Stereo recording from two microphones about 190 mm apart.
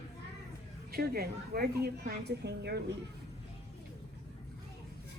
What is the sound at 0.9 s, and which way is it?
A woman's voice, 55° right (ahead or behind).